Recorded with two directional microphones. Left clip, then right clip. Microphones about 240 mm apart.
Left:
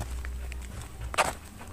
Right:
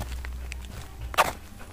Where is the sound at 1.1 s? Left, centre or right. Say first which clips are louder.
Right 4 dB; centre.